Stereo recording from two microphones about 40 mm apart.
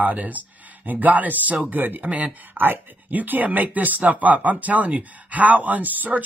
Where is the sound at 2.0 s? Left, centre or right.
Right.